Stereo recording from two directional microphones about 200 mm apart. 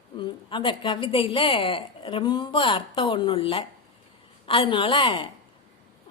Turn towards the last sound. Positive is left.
turn(degrees=25)  # may be behind; listen again after turning